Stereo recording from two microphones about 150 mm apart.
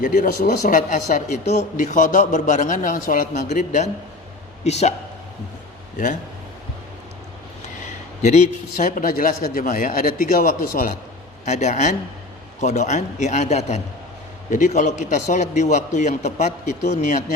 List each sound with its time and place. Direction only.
0.0 s a man's voice: 55° left (ahead or behind)
8.2 s a man's voice: 50° left (ahead or behind); by 10.8 s 70° left (ahead or behind)
11.4 s a man's voice: 50° left (ahead or behind)